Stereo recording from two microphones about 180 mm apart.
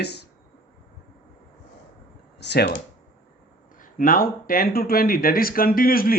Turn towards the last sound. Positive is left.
turn(degrees=55)  # may be behind; listen again after turning